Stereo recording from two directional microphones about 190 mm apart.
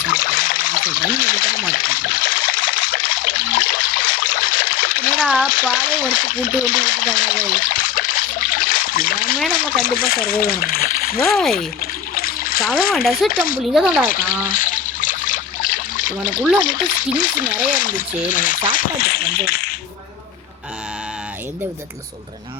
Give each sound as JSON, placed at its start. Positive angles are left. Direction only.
{"t": 0.1, "sound": "trickle", "side_deg": 45}
{"t": 5.2, "sound": "speech", "side_deg": 0}
{"t": 5.7, "sound": "speech", "side_deg": 45}
{"t": 6.6, "sound": "a sound", "side_deg": 45}
{"t": 9.5, "sound": "speech", "side_deg": 45}
{"t": 11.3, "sound": "speech", "side_deg": 0}
{"t": 11.5, "sound": "splash", "side_deg": 50}
{"t": 12.9, "sound": "speech", "side_deg": 0}
{"t": 13.3, "sound": "speech", "side_deg": 50}
{"t": 13.7, "sound": "speech", "side_deg": 0}
{"t": 14.1, "sound": "speech", "side_deg": 45}
{"t": 14.4, "sound": "trickle", "side_deg": 45}
{"t": 16.6, "sound": "speech", "side_deg": 45}